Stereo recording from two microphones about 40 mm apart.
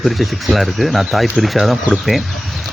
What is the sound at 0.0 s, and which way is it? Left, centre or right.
Speech, centre.